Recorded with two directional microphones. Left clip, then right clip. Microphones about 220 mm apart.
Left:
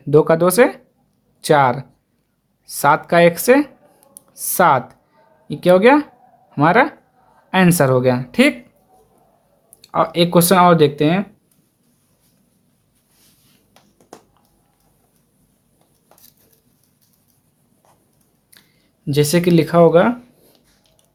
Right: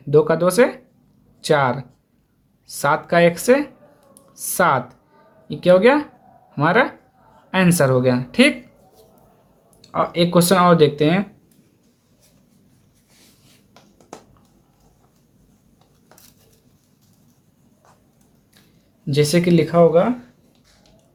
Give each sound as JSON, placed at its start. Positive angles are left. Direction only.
{"t": 0.1, "sound": "speech", "side_deg": 30}
{"t": 9.8, "sound": "speech", "side_deg": 35}
{"t": 19.0, "sound": "speech", "side_deg": 30}